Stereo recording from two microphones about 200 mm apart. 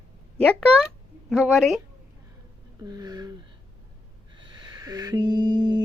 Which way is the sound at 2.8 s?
20° right (ahead or behind).